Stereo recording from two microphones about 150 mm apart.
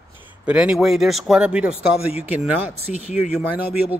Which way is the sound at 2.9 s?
50° left (ahead or behind).